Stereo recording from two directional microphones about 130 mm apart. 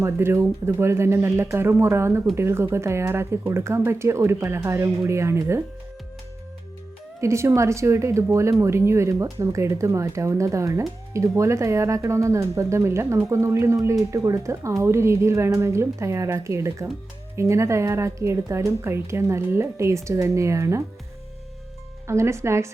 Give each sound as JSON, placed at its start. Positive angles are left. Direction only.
{"t": 0.0, "sound": "speech", "side_deg": -20}
{"t": 7.2, "sound": "speech", "side_deg": -20}
{"t": 22.0, "sound": "speech", "side_deg": -20}